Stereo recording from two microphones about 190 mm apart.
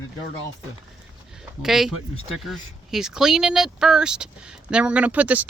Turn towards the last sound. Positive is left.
turn(degrees=-10)  # may be behind; listen again after turning